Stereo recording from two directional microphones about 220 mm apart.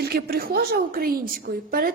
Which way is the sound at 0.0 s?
45° right (ahead or behind).